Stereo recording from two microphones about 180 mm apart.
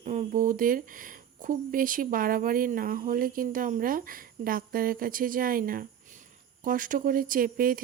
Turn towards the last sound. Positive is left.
turn(degrees=-50)  # may be behind; listen again after turning